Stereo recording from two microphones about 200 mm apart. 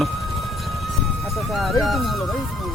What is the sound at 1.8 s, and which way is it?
Speech, centre (ahead or behind).